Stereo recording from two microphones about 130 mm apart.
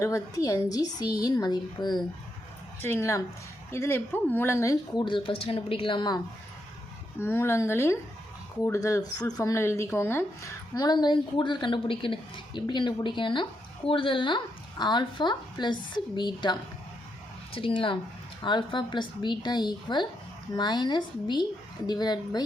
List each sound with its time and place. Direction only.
0.0 s a woman's voice: 25° left (ahead or behind)
2.8 s a woman's voice: 20° left (ahead or behind)
4.9 s speech: 40° left (ahead or behind)
7.2 s a woman's voice: 20° left (ahead or behind)